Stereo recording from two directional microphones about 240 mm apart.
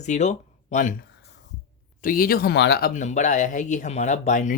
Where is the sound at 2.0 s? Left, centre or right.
Left.